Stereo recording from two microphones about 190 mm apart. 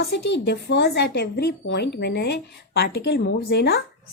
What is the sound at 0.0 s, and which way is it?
A woman's voice, 60° left (ahead or behind).